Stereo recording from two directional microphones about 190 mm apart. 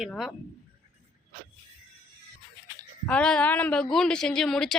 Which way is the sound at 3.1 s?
5° left (ahead or behind).